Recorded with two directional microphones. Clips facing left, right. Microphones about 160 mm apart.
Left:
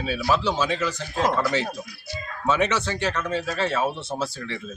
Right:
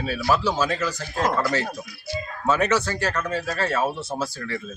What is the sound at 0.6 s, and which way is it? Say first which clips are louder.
Speech: even; 20° left (ahead or behind).